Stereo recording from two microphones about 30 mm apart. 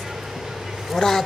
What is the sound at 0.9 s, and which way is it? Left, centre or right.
Speech, centre.